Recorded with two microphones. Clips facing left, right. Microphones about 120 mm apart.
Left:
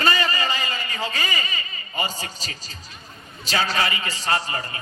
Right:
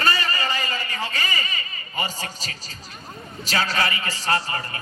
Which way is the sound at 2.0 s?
25° left (ahead or behind).